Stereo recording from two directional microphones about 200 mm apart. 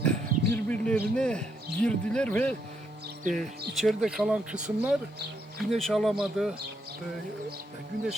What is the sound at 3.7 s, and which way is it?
Speech, centre (ahead or behind).